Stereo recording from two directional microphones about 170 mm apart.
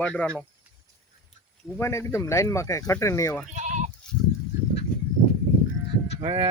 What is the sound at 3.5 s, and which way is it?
Goat, 45° right (ahead or behind).